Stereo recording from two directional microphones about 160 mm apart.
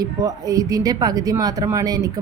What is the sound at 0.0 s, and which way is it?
Speech, 20° right (ahead or behind).